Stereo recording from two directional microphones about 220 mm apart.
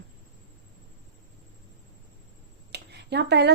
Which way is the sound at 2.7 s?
50° right (ahead or behind).